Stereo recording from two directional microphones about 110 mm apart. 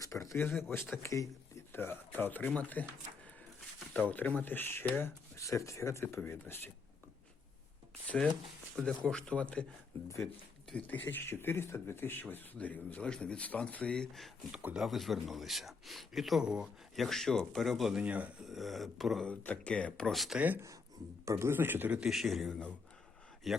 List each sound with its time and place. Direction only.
0.0 s speech: 30° left (ahead or behind)
4.1 s speech: 15° left (ahead or behind)
8.0 s speech: 10° left (ahead or behind)
10.7 s speech: 15° left (ahead or behind)
14.5 s speech: 10° right (ahead or behind)
18.0 s speech: 10° right (ahead or behind)
19.3 s speech: 15° left (ahead or behind)
21.2 s speech: 25° right (ahead or behind)
22.0 s speech: centre (ahead or behind)